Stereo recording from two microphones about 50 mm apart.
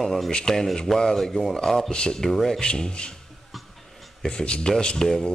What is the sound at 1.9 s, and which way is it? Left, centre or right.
Speech, centre.